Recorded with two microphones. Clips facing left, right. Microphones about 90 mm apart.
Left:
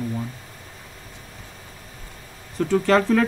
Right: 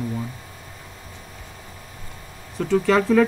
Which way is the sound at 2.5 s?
Centre (ahead or behind).